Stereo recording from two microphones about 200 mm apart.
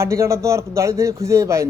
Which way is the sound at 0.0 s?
15° right (ahead or behind).